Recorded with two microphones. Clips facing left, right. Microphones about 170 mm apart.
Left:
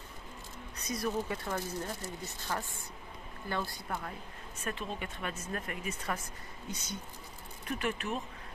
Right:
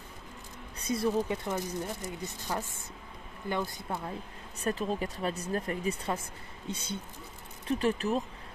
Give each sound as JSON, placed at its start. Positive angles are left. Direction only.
{"t": 0.7, "sound": "speech", "side_deg": -30}
{"t": 4.6, "sound": "speech", "side_deg": -35}